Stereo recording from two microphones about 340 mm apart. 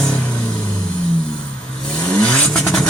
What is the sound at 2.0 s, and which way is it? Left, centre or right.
Vehicle, centre.